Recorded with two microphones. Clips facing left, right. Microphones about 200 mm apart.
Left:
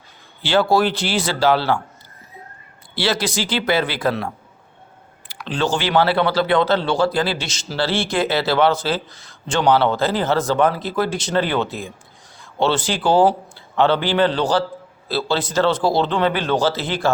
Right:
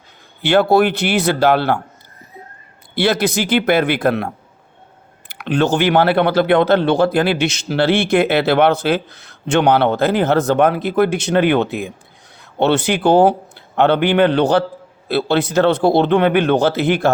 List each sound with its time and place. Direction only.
0.4 s speech: 60° right (ahead or behind)
2.9 s speech: 55° right (ahead or behind)
5.3 s speech: 60° right (ahead or behind)